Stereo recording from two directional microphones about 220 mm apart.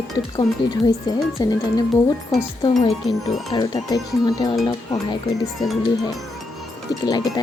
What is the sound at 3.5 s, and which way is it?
Speech, 15° left (ahead or behind).